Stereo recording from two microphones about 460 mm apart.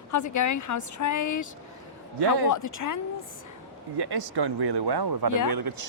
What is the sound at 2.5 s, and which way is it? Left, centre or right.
Speech, left.